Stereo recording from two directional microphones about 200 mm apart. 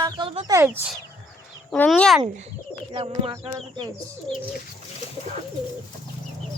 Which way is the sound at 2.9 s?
25° right (ahead or behind).